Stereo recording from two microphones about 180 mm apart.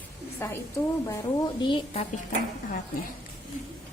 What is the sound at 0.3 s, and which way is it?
Speech, 15° left (ahead or behind).